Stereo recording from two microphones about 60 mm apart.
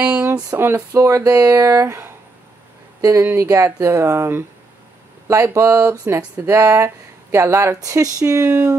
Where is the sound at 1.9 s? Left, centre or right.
Right.